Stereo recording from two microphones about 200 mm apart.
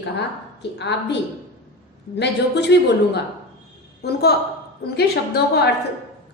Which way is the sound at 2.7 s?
60° left (ahead or behind).